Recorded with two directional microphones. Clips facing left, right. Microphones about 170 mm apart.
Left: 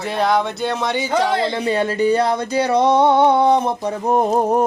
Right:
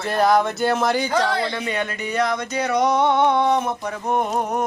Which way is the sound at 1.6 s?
30° left (ahead or behind).